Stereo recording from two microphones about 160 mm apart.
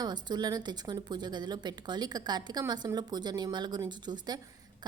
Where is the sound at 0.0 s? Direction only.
25° right (ahead or behind).